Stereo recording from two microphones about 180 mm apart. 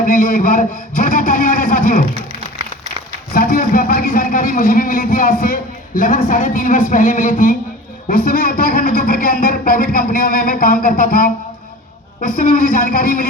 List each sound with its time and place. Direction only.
0.0 s a man's voice: 50° left (ahead or behind)
3.3 s a man's voice: 55° left (ahead or behind)